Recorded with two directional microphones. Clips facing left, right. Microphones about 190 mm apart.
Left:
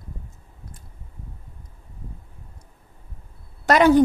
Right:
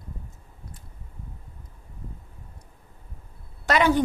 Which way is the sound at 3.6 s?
45° left (ahead or behind).